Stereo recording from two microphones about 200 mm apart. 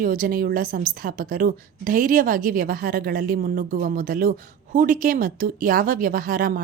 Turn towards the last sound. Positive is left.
turn(degrees=-45)  # may be behind; listen again after turning